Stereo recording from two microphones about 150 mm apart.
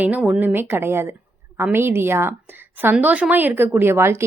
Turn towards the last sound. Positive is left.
turn(degrees=-15)  # may be behind; listen again after turning